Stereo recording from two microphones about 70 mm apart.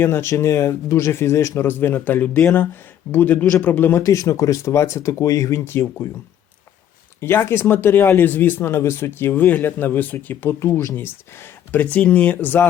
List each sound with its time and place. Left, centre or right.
0.0 s speech: left
4.0 s speech: left
7.2 s speech: left
10.6 s speech: left
11.7 s speech: left